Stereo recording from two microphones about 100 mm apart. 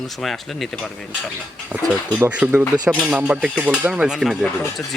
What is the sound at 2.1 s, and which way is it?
Speech, 15° right (ahead or behind).